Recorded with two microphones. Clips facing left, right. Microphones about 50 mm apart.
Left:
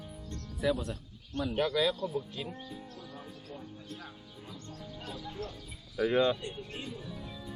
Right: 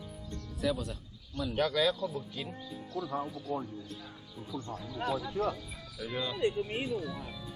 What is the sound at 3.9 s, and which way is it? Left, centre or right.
Speech, left.